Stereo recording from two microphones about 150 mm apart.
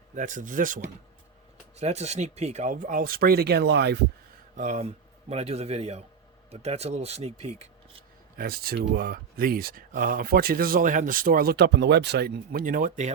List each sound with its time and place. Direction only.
0.1 s speech: 60° right (ahead or behind)
1.7 s speech: 45° right (ahead or behind); by 3.9 s 90° right
4.5 s speech: 50° right (ahead or behind)
8.4 s speech: 85° right; by 13.1 s 60° right (ahead or behind)